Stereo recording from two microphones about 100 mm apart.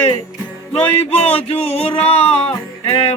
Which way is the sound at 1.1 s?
90° left.